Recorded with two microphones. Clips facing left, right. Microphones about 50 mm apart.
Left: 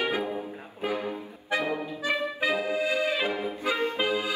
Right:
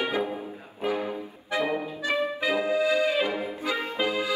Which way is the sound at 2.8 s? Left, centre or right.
Left.